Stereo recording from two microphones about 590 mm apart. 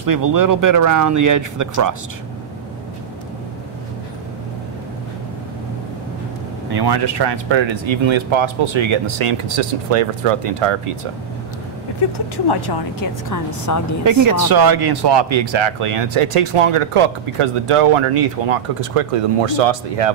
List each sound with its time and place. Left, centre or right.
0.0 s speech: right
6.7 s speech: right
12.4 s speech: left
13.3 s a woman's voice: left
14.0 s speech: right